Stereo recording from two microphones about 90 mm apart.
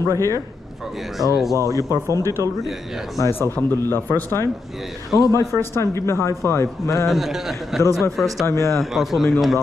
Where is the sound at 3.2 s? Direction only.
30° left (ahead or behind).